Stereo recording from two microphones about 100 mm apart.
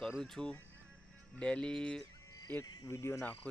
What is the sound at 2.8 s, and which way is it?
Speech, 30° left (ahead or behind).